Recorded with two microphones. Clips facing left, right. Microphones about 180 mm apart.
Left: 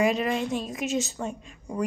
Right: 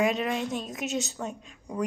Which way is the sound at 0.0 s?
Centre (ahead or behind).